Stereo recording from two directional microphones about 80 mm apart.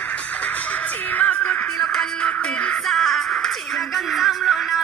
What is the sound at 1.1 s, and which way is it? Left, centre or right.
Music, left.